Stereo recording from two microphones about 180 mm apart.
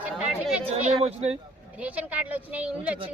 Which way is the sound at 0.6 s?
35° right (ahead or behind).